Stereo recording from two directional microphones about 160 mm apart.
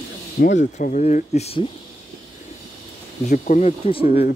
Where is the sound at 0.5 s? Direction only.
50° left (ahead or behind).